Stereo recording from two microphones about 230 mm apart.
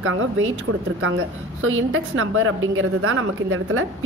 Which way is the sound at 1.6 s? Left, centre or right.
Right.